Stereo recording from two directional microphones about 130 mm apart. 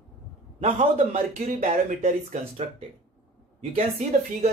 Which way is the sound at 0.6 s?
55° right (ahead or behind).